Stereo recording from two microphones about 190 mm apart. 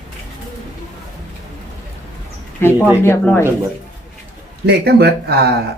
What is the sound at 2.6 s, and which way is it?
Speech, 10° left (ahead or behind).